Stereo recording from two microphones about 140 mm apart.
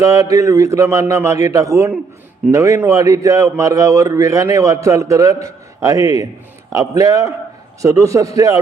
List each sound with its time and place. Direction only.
0.0 s a man's voice: 25° right (ahead or behind)